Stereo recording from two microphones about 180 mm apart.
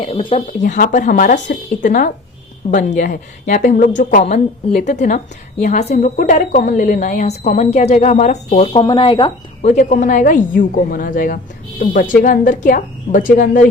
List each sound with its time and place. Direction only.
0.0 s a woman's voice: 30° left (ahead or behind)
0.6 s a woman's voice: 45° left (ahead or behind); by 9.3 s 25° left (ahead or behind)
9.6 s a woman's voice: 45° left (ahead or behind)